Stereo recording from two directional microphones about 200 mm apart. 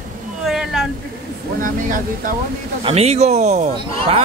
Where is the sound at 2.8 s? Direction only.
30° right (ahead or behind).